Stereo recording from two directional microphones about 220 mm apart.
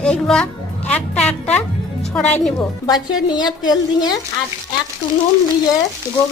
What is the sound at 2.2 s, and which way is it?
Speech, 30° left (ahead or behind).